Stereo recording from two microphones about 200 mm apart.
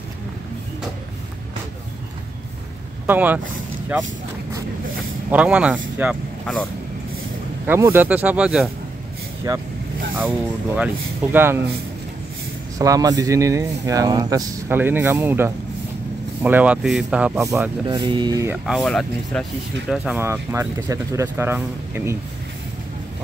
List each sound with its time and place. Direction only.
3.1 s speech: 10° right (ahead or behind)
5.3 s speech: 5° right (ahead or behind)
6.4 s speech: 5° left (ahead or behind)
7.6 s speech: 10° right (ahead or behind)
9.5 s speech: 20° right (ahead or behind)
11.3 s speech: 10° right (ahead or behind)
12.7 s speech: 15° right (ahead or behind)
18.7 s speech: centre (ahead or behind)
19.9 s speech: 10° right (ahead or behind)